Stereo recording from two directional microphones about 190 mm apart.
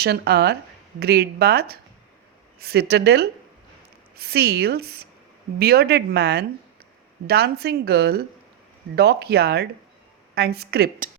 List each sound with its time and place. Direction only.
0.0 s speech: 60° right (ahead or behind)